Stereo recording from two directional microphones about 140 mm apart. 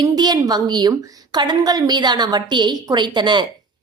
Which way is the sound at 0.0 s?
30° right (ahead or behind).